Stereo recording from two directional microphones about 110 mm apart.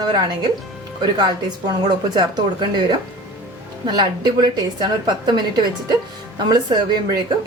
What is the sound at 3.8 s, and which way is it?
A woman's voice, 40° right (ahead or behind).